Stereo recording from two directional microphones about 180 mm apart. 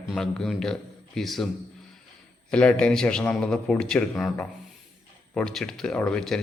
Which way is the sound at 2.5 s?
5° left (ahead or behind).